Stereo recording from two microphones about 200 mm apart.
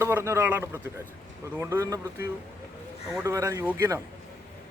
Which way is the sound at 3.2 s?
15° right (ahead or behind).